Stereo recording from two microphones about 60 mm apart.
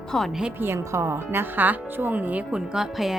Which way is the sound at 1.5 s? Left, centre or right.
Right.